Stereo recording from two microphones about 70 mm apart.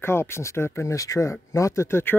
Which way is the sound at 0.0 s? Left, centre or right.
Left.